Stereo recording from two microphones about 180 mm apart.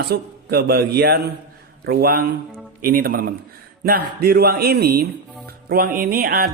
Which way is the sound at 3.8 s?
55° right (ahead or behind).